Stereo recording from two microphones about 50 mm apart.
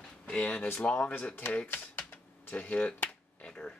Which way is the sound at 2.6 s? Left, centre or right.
Left.